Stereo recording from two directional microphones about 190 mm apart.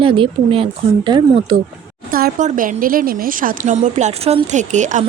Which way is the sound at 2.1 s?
45° right (ahead or behind).